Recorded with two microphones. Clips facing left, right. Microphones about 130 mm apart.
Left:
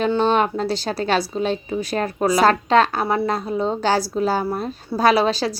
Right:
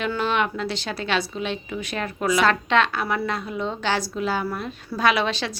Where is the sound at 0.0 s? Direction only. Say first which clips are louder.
Left 6 dB; 30° left (ahead or behind).